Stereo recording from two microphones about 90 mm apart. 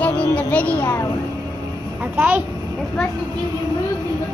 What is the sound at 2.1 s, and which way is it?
Speech, 20° right (ahead or behind).